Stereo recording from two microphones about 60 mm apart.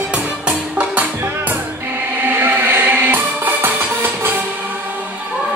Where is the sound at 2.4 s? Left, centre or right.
Right.